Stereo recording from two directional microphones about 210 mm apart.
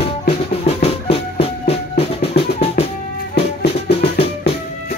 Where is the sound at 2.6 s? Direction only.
30° left (ahead or behind).